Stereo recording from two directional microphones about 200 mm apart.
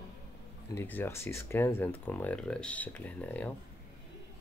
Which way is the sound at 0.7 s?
10° left (ahead or behind).